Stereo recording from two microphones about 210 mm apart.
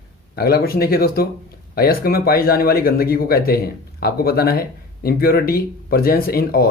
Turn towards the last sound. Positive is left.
turn(degrees=45)  # may be behind; listen again after turning